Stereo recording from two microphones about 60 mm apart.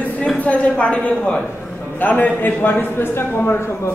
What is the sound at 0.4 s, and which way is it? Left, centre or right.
A woman's voice, left.